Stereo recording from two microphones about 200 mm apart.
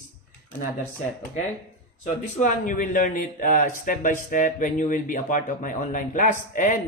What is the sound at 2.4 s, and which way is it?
Speech, 40° left (ahead or behind).